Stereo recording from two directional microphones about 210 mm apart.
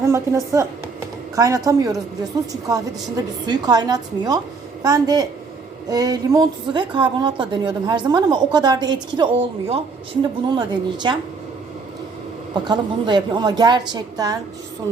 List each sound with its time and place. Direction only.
0.0 s a woman's voice: 15° right (ahead or behind)
12.6 s a woman's voice: 20° right (ahead or behind)